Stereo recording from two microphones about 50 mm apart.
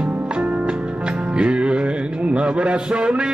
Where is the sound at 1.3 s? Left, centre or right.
Right.